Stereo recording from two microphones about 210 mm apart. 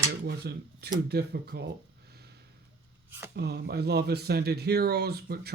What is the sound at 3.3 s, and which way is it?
Speech, 50° right (ahead or behind).